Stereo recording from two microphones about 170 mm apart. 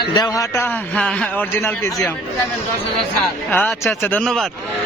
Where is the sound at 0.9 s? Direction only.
5° left (ahead or behind).